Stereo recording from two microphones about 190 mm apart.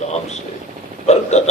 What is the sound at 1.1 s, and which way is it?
Speech, 35° left (ahead or behind).